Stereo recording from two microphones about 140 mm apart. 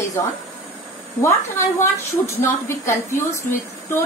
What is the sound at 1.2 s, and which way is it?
A woman's voice, 20° left (ahead or behind).